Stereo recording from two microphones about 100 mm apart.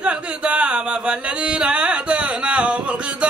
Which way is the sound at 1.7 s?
10° right (ahead or behind).